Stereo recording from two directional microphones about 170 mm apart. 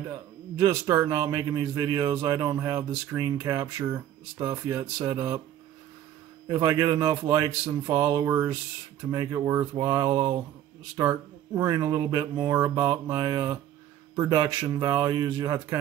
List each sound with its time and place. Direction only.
0.6 s speech: 20° right (ahead or behind)
6.4 s speech: 20° right (ahead or behind)